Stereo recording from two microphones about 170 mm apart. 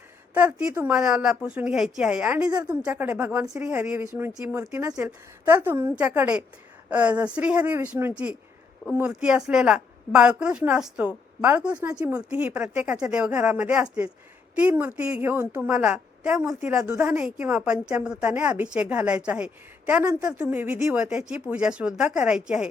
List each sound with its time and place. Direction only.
0.3 s a woman's voice: 10° right (ahead or behind)
11.9 s speech: 20° right (ahead or behind)
12.1 s a woman's voice: 10° right (ahead or behind)